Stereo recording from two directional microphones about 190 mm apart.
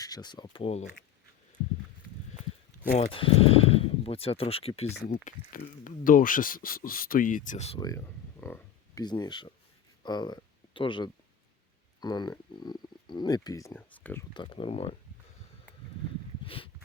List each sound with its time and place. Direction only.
0.0 s speech: 20° left (ahead or behind)
2.9 s speech: 30° left (ahead or behind)
4.9 s speech: 50° left (ahead or behind)
7.8 s a sound: 15° left (ahead or behind)
9.0 s speech: 25° left (ahead or behind)
14.3 s speech: 25° left (ahead or behind)
16.4 s a sound: 30° left (ahead or behind)